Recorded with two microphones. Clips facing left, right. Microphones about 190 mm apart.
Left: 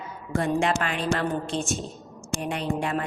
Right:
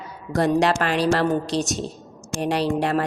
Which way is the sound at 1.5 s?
35° right (ahead or behind).